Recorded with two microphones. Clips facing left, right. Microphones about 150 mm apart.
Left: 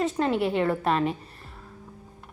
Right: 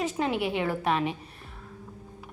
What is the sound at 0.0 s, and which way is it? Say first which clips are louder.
A woman's voice: left 3 dB; centre (ahead or behind).